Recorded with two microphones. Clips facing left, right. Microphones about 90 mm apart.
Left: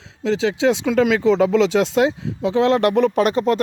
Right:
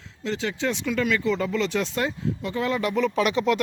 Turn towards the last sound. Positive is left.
turn(degrees=40)  # may be behind; listen again after turning